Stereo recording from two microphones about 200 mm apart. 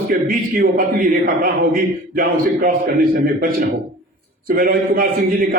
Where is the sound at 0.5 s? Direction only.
45° right (ahead or behind).